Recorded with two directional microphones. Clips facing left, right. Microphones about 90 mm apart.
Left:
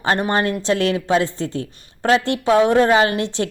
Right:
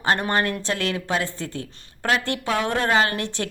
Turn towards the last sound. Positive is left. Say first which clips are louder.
# left 5 dB
turn(degrees=20)  # may be behind; listen again after turning